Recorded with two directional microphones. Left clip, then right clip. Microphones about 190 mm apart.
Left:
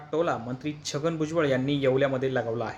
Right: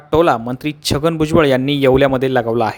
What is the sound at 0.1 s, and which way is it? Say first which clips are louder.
Speech: right 14 dB; 60° right (ahead or behind).